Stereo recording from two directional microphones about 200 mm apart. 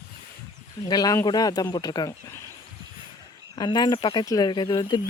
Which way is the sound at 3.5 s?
20° left (ahead or behind).